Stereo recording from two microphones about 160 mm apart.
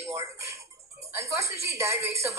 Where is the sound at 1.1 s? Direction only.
20° right (ahead or behind).